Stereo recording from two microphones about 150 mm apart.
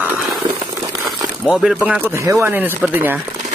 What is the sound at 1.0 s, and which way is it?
Crumpling, centre (ahead or behind).